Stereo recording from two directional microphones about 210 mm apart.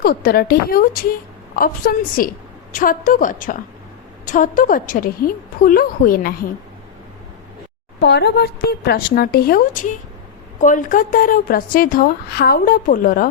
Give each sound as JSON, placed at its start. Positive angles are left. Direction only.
{"t": 0.0, "sound": "a woman's voice", "side_deg": 45}
{"t": 8.0, "sound": "a woman's voice", "side_deg": 55}